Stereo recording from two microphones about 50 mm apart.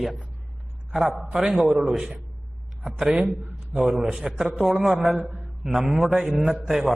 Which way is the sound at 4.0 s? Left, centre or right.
Centre.